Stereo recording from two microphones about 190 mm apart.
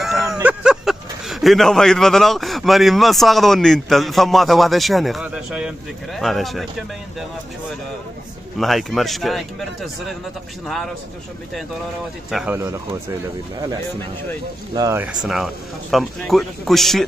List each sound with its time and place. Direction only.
0.0 s a man's voice: centre (ahead or behind)
8.5 s a man's voice: centre (ahead or behind)
12.3 s a man's voice: centre (ahead or behind)
14.7 s speech: 20° right (ahead or behind)
15.2 s a man's voice: centre (ahead or behind)